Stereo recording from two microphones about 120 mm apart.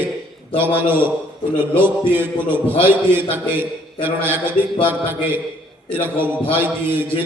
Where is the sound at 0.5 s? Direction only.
15° right (ahead or behind).